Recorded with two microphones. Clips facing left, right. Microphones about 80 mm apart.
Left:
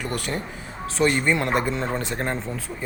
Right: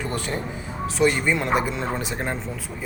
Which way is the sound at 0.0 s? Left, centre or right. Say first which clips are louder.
Even; right.